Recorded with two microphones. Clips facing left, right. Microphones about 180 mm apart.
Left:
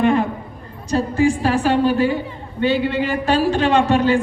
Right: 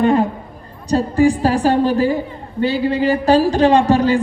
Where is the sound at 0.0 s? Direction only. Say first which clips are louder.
Right 2 dB; 35° right (ahead or behind).